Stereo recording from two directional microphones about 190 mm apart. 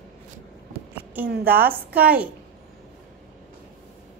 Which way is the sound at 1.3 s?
55° right (ahead or behind).